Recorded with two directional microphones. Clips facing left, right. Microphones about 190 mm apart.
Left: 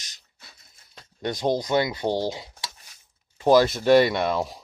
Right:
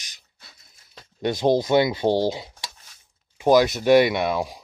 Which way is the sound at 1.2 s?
25° right (ahead or behind).